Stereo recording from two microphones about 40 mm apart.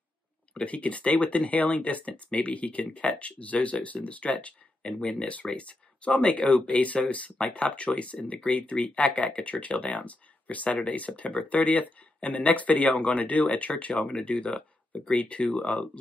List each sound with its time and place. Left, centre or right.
0.7 s speech: left